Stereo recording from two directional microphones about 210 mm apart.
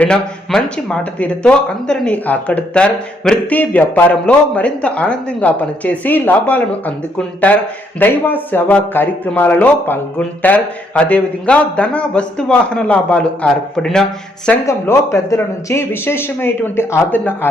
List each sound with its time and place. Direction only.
0.0 s speech: 5° left (ahead or behind)
14.7 s speech: 15° left (ahead or behind)